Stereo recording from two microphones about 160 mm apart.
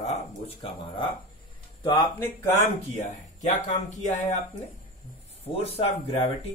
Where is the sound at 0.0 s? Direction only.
40° left (ahead or behind).